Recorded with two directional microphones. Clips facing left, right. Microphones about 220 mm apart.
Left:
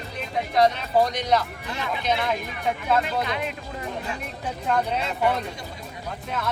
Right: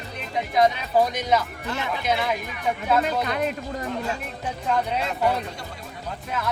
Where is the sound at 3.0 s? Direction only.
45° right (ahead or behind).